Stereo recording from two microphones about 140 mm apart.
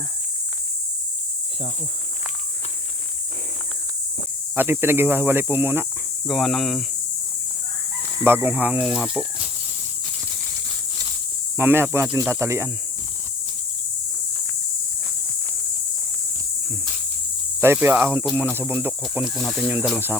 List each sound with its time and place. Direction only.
4.5 s speech: 15° right (ahead or behind)
6.2 s speech: centre (ahead or behind)
8.2 s speech: 15° right (ahead or behind)
11.5 s speech: 15° right (ahead or behind)
17.6 s speech: 15° right (ahead or behind)
19.1 s speech: centre (ahead or behind)